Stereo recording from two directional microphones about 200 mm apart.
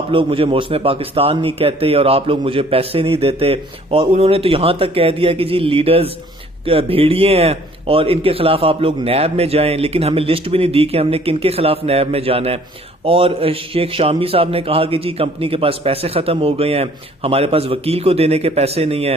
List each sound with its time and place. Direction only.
0.1 s a man's voice: 25° right (ahead or behind)